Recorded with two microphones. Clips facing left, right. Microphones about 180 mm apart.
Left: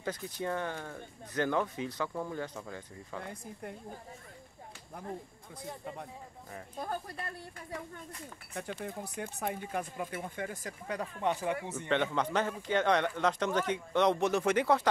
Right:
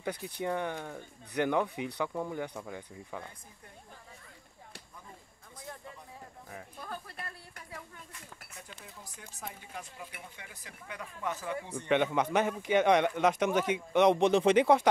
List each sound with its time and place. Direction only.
0.0 s a man's voice: 15° right (ahead or behind)
6.8 s speech: 40° left (ahead or behind)
8.5 s speech: 60° left (ahead or behind); by 11.7 s 25° left (ahead or behind)
11.9 s a man's voice: 15° right (ahead or behind)